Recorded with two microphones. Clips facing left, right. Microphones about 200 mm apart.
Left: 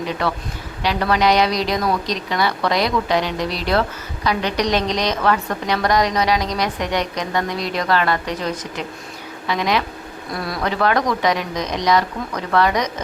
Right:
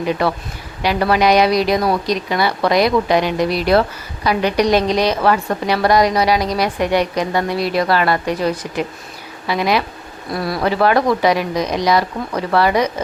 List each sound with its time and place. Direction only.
0.0 s speech: 10° right (ahead or behind)